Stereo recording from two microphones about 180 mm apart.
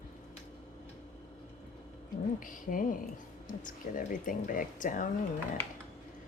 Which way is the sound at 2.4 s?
50° left (ahead or behind).